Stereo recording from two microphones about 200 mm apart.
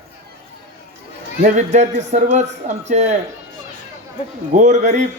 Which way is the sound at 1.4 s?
35° right (ahead or behind).